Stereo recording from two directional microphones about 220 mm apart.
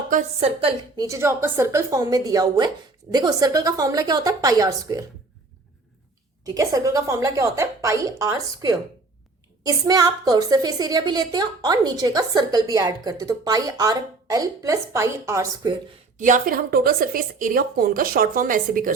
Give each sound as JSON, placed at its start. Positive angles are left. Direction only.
{"t": 0.1, "sound": "a woman's voice", "side_deg": -30}
{"t": 1.0, "sound": "a woman's voice", "side_deg": -15}
{"t": 6.4, "sound": "a woman's voice", "side_deg": -15}
{"t": 16.1, "sound": "a woman's voice", "side_deg": -35}